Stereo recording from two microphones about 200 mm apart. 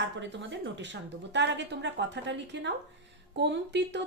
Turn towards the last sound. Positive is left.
turn(degrees=-60)  # may be behind; listen again after turning